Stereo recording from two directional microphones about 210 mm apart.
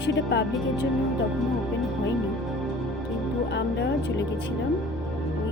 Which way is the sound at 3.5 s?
55° left (ahead or behind).